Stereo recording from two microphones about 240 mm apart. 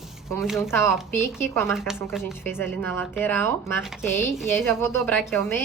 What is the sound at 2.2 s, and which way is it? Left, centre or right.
Speech, centre.